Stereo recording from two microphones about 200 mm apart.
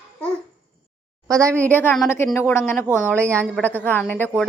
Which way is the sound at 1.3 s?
15° right (ahead or behind).